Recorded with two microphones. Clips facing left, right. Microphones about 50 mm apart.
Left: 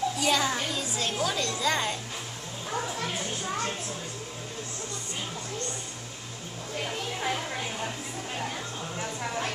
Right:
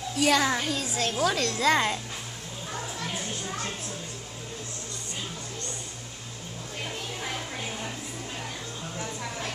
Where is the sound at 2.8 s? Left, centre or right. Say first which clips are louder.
Left 3 dB; left.